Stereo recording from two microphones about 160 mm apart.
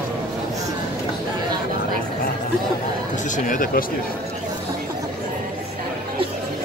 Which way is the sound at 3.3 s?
55° left (ahead or behind).